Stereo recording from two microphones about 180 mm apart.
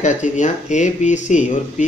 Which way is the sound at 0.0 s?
40° left (ahead or behind).